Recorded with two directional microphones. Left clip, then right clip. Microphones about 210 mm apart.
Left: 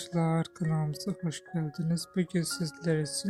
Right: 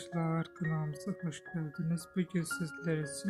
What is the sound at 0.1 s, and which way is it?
Speech, 25° left (ahead or behind).